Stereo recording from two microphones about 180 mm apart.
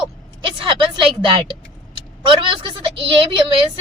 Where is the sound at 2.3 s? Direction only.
30° right (ahead or behind).